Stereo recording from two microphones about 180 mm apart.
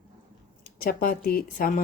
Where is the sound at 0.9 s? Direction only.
55° left (ahead or behind).